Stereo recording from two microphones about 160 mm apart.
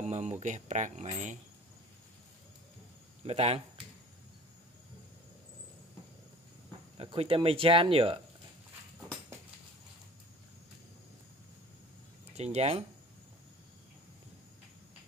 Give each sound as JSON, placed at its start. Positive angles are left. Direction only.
{"t": 0.0, "sound": "speech", "side_deg": -45}
{"t": 3.3, "sound": "speech", "side_deg": -40}
{"t": 7.0, "sound": "speech", "side_deg": -35}
{"t": 12.5, "sound": "speech", "side_deg": -40}